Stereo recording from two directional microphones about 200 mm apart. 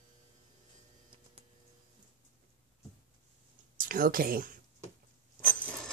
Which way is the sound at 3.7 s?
45° right (ahead or behind).